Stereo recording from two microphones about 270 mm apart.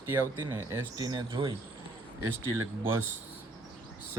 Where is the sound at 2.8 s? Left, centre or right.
Centre.